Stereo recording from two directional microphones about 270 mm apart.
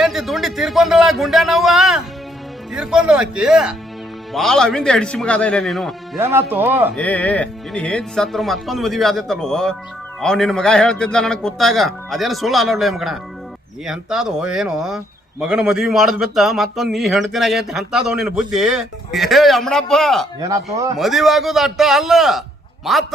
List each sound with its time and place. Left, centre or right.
0.0 s speech: centre
6.9 s speech: centre